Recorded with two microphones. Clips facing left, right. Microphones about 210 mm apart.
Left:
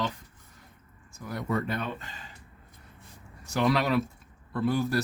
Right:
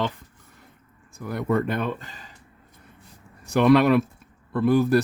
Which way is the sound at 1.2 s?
55° right (ahead or behind).